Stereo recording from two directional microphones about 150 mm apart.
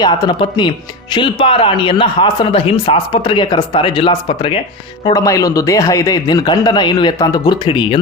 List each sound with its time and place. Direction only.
0.0 s a man's voice: 30° left (ahead or behind)
5.0 s speech: 20° left (ahead or behind)